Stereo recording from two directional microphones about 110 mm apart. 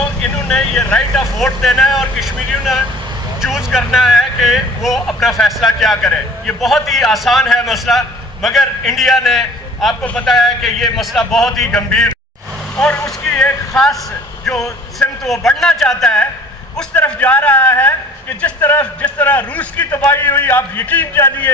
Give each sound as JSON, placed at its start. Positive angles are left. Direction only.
{"t": 0.5, "sound": "speech", "side_deg": 5}
{"t": 13.2, "sound": "a sound", "side_deg": 10}
{"t": 15.4, "sound": "a man's voice", "side_deg": 5}